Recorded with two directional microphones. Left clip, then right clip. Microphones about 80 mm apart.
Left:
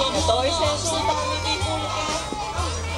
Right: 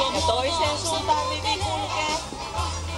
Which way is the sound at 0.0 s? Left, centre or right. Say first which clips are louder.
Left 2 dB; centre.